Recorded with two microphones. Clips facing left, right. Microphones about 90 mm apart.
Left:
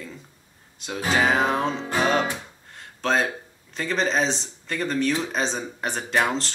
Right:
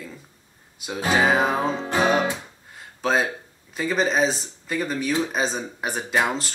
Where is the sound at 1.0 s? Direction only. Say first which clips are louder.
Right 1 dB; 5° right (ahead or behind).